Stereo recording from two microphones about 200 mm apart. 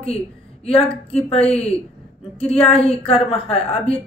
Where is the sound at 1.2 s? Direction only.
30° left (ahead or behind).